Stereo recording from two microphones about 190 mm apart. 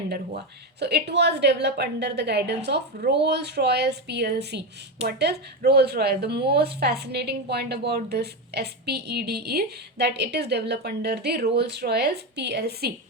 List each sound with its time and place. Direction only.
0.8 s speech: 60° right (ahead or behind)